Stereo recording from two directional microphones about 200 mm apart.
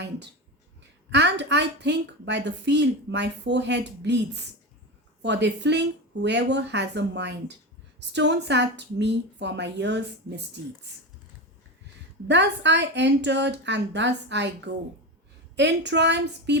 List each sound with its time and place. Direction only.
1.1 s a woman's voice: 60° right (ahead or behind)
12.3 s a woman's voice: 60° right (ahead or behind)